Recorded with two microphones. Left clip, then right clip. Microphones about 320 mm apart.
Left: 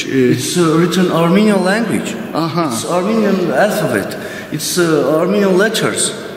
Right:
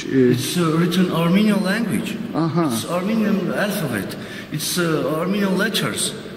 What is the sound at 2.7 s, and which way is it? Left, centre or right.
A man's voice, centre.